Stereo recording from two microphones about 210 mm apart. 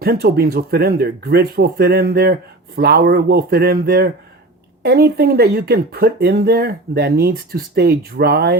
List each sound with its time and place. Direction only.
0.0 s speech: 45° right (ahead or behind)